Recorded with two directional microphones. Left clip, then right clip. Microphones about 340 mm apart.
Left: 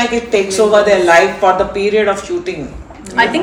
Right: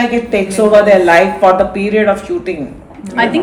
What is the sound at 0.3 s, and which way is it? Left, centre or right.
Speech, right.